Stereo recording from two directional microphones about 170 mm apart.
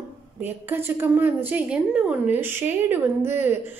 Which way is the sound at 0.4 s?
10° right (ahead or behind).